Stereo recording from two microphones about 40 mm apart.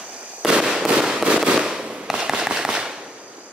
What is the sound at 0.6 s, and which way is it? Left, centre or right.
Fireworks, centre.